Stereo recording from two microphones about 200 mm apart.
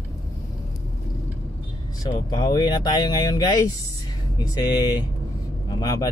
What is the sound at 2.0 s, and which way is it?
A man's voice, 20° left (ahead or behind).